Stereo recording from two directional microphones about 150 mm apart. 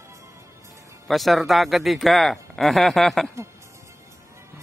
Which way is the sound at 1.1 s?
Centre (ahead or behind).